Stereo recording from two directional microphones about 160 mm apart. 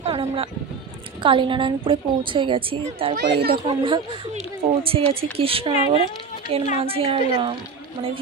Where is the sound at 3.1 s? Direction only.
75° right (ahead or behind).